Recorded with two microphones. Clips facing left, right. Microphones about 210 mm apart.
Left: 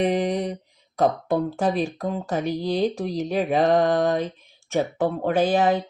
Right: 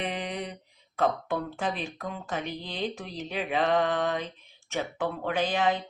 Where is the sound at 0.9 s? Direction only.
40° left (ahead or behind).